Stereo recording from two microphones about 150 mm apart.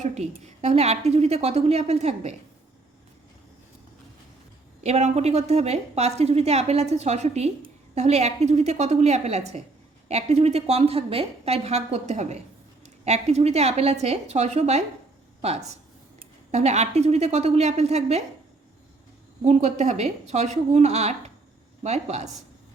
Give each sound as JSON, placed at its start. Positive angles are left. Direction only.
{"t": 0.0, "sound": "a woman's voice", "side_deg": -45}
{"t": 4.8, "sound": "a woman's voice", "side_deg": -45}
{"t": 19.5, "sound": "a woman's voice", "side_deg": -50}